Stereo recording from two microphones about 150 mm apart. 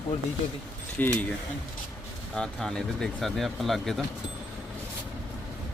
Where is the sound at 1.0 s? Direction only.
10° left (ahead or behind).